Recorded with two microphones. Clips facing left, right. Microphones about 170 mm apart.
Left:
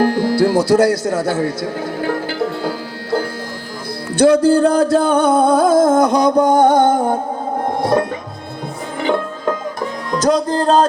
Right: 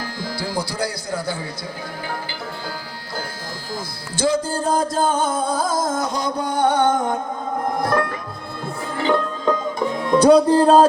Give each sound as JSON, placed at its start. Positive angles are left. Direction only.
{"t": 0.0, "sound": "music", "side_deg": 65}
{"t": 7.7, "sound": "music", "side_deg": 25}
{"t": 9.0, "sound": "music", "side_deg": 15}
{"t": 10.1, "sound": "speech", "side_deg": -5}